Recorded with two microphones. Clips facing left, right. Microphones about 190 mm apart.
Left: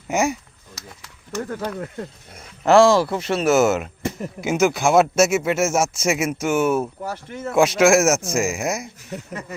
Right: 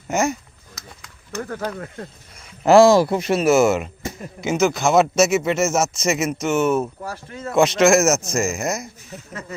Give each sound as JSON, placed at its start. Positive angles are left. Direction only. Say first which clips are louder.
{"t": 0.1, "sound": "speech", "louder": "even", "side_deg": 15}
{"t": 1.6, "sound": "speech", "louder": "even", "side_deg": 0}
{"t": 2.6, "sound": "speech", "louder": "right 2 dB", "side_deg": -15}
{"t": 3.4, "sound": "speech", "louder": "even", "side_deg": 0}
{"t": 7.0, "sound": "speech", "louder": "left 2 dB", "side_deg": 20}
{"t": 7.5, "sound": "speech", "louder": "even", "side_deg": 10}